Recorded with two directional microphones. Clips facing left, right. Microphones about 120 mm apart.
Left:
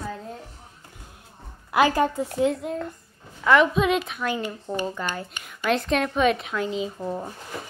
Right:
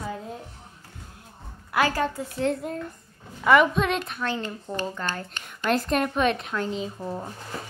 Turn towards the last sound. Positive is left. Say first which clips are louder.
# left 3 dB
turn(degrees=5)  # may be behind; listen again after turning